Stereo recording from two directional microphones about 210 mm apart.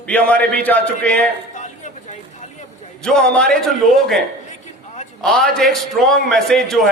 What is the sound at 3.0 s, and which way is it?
A man's voice, 5° left (ahead or behind).